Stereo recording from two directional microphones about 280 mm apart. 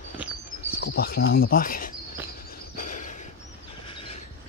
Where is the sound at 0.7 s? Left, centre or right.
Left.